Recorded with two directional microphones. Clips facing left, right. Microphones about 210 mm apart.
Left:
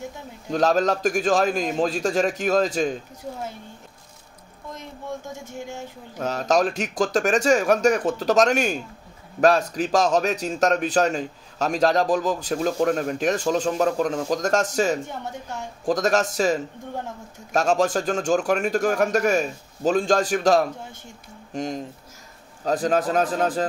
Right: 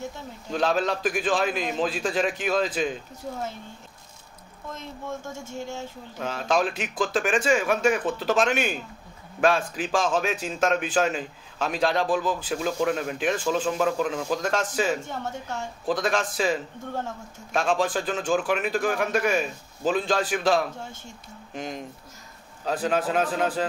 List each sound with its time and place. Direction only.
0.5 s a man's voice: 40° left (ahead or behind)
5.4 s speech: 15° left (ahead or behind)
6.1 s a man's voice: 40° left (ahead or behind)